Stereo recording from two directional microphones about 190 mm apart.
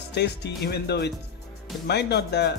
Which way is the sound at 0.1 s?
60° left (ahead or behind).